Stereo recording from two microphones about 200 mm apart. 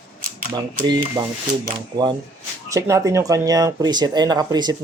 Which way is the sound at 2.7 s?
15° right (ahead or behind).